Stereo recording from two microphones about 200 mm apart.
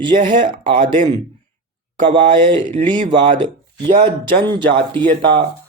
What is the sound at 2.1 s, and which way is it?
Speech, 25° right (ahead or behind).